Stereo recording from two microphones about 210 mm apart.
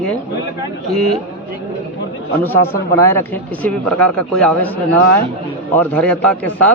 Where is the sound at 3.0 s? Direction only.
10° left (ahead or behind).